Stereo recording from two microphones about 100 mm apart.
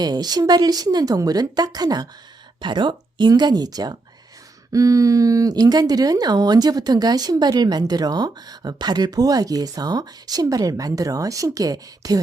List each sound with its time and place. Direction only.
0.0 s speech: 45° right (ahead or behind)